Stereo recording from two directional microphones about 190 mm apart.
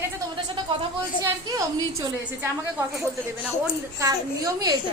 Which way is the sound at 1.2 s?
15° right (ahead or behind).